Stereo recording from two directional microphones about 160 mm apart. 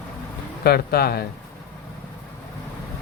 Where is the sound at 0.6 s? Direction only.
75° left (ahead or behind).